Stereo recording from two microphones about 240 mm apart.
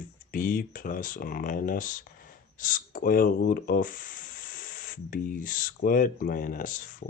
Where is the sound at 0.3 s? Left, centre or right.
Left.